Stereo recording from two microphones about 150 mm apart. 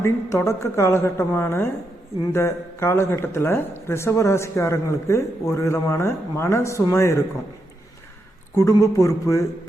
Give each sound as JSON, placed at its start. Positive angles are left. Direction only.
{"t": 0.0, "sound": "speech", "side_deg": 20}
{"t": 8.5, "sound": "speech", "side_deg": 20}